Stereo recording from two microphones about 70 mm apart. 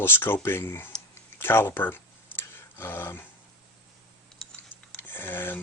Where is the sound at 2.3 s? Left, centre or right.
Left.